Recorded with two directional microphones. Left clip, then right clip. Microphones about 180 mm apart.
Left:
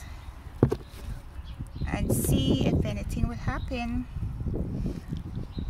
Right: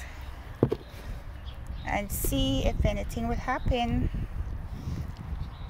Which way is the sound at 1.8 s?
20° left (ahead or behind).